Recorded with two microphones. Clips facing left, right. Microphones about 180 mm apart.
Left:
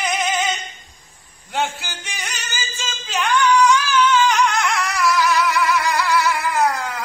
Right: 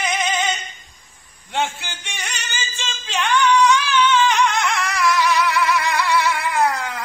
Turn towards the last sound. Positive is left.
turn(degrees=0)  # may be behind; listen again after turning